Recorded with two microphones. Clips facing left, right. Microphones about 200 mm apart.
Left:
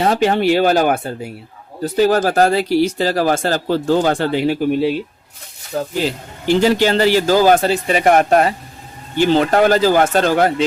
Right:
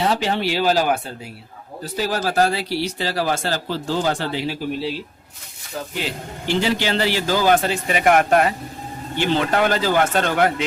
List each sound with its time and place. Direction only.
0.0 s speech: 50° left (ahead or behind)
5.7 s speech: 35° left (ahead or behind)